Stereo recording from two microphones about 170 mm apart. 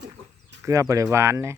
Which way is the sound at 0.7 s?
20° right (ahead or behind).